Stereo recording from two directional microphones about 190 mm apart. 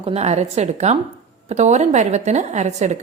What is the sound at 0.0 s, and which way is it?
A woman's voice, 35° right (ahead or behind).